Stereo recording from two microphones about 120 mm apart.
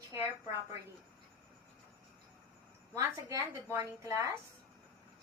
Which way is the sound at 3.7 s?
25° right (ahead or behind).